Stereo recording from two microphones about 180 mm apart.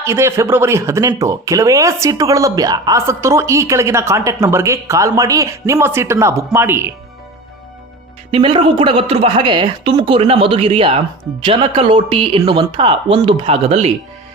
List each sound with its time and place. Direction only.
0.0 s speech: 15° right (ahead or behind)
8.3 s a woman's voice: 30° right (ahead or behind)